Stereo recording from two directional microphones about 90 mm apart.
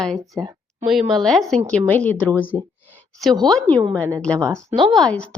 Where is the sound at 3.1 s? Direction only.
Centre (ahead or behind).